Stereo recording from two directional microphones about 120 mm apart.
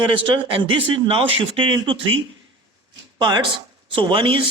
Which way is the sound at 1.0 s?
50° right (ahead or behind).